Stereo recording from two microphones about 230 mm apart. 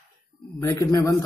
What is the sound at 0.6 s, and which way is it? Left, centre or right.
Speech, centre.